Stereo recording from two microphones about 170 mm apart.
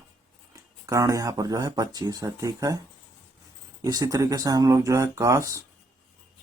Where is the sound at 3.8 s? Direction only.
20° right (ahead or behind).